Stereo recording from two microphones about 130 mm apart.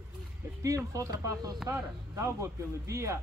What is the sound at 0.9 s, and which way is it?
Speech, 25° right (ahead or behind).